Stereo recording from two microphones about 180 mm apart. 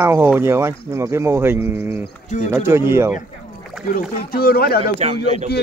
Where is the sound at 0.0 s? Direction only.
15° right (ahead or behind).